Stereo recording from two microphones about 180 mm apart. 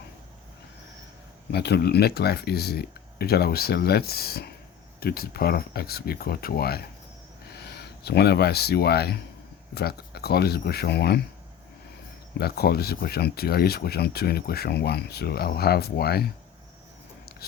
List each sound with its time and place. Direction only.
1.5 s speech: 65° left (ahead or behind)
12.4 s speech: 60° left (ahead or behind)